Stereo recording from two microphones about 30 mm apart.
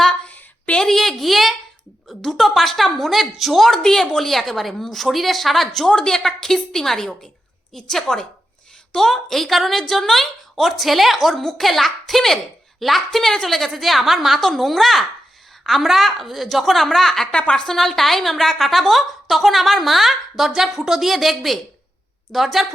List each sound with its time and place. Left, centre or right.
0.3 s a sound: left
0.8 s a woman's voice: centre
3.7 s a woman's voice: centre
4.2 s a woman's voice: centre
5.9 s a woman's voice: left
6.1 s a woman's voice: centre
8.9 s a woman's voice: centre
13.3 s a woman's voice: centre